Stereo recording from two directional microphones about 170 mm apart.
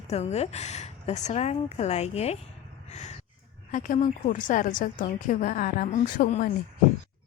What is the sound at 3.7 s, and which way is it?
A woman's voice, 45° left (ahead or behind).